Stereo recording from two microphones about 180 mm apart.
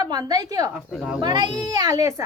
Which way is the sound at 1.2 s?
25° right (ahead or behind).